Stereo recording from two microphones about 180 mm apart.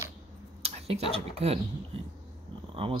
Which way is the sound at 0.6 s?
35° right (ahead or behind).